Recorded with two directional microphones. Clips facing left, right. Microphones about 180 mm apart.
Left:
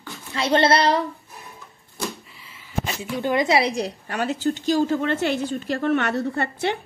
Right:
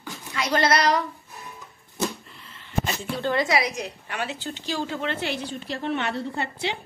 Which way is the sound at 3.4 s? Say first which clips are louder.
Left 4 dB; 30° left (ahead or behind).